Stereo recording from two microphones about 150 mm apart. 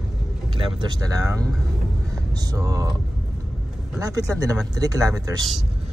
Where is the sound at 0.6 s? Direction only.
35° right (ahead or behind).